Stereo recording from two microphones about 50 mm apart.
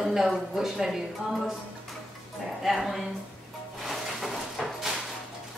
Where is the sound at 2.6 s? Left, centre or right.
Centre.